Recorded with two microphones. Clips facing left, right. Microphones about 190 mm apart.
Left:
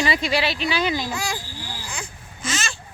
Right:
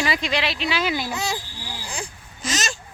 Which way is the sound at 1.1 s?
20° right (ahead or behind).